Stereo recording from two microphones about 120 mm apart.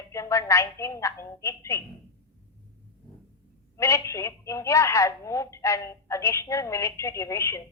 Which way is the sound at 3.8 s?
25° left (ahead or behind).